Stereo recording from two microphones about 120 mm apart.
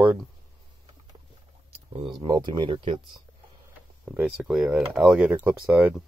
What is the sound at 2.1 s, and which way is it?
Speech, 35° right (ahead or behind).